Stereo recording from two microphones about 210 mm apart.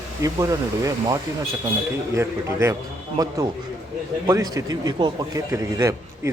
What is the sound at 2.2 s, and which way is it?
Speech, 15° right (ahead or behind).